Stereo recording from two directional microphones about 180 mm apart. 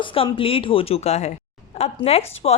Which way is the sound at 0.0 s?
30° left (ahead or behind).